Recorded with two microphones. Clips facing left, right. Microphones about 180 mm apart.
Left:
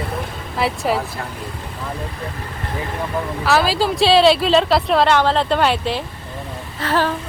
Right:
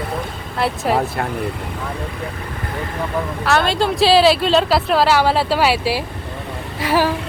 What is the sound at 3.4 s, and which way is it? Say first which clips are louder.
A woman's voice: even; centre (ahead or behind).